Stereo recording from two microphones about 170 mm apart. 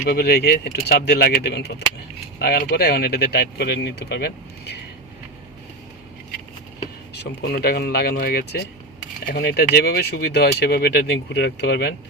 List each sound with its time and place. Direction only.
0.2 s speech: 70° left (ahead or behind)
7.1 s speech: 70° left (ahead or behind)